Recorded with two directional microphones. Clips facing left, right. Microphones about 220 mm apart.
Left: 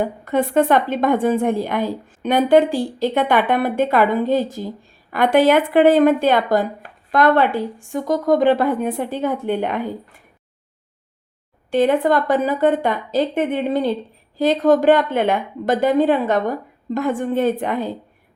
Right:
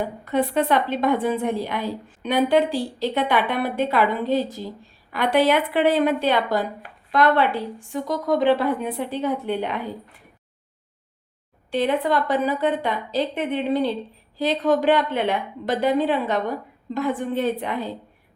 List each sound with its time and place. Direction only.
0.0 s a woman's voice: 50° left (ahead or behind)
11.7 s a woman's voice: 45° left (ahead or behind)